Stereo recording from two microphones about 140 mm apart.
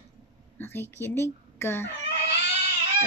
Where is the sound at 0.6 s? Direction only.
15° left (ahead or behind).